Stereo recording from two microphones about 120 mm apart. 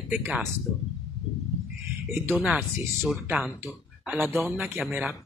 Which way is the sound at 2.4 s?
5° right (ahead or behind).